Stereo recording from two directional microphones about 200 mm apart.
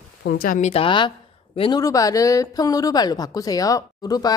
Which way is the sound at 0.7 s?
25° left (ahead or behind).